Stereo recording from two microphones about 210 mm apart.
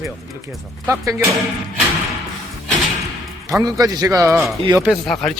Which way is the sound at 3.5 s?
15° right (ahead or behind).